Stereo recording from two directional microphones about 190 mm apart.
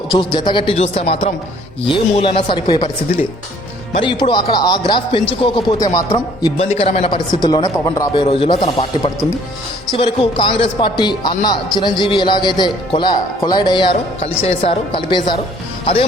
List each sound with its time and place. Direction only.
0.1 s speech: 25° left (ahead or behind)
3.9 s speech: 25° left (ahead or behind)
6.1 s speech: 30° left (ahead or behind)
9.9 s speech: 25° left (ahead or behind)